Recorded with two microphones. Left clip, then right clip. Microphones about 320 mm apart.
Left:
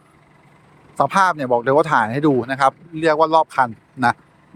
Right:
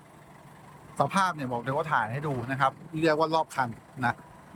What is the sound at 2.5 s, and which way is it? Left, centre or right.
Speech, centre.